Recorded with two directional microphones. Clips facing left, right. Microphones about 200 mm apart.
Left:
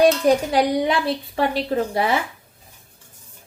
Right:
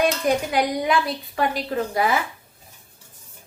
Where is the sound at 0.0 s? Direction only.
35° left (ahead or behind).